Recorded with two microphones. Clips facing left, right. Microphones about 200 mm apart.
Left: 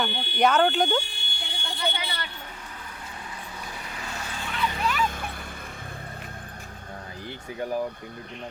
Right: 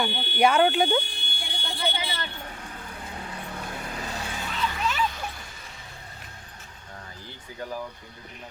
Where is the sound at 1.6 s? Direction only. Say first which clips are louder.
Even; 25° right (ahead or behind).